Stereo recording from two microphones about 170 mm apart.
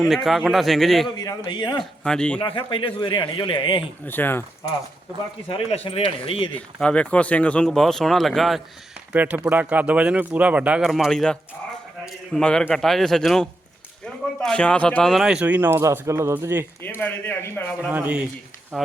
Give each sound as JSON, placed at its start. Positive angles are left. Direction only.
{"t": 0.0, "sound": "speech", "side_deg": 0}
{"t": 1.0, "sound": "a man's voice", "side_deg": 25}
{"t": 1.8, "sound": "speech", "side_deg": 5}
{"t": 2.4, "sound": "a man's voice", "side_deg": 25}
{"t": 4.0, "sound": "speech", "side_deg": 10}
{"t": 5.5, "sound": "speech", "side_deg": 35}
{"t": 6.5, "sound": "a man's voice", "side_deg": 5}
{"t": 16.8, "sound": "speech", "side_deg": 10}
{"t": 17.8, "sound": "a man's voice", "side_deg": -10}